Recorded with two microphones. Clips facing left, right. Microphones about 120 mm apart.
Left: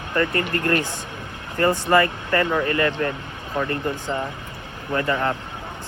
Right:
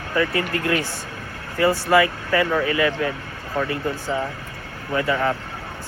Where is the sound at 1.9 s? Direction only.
10° right (ahead or behind).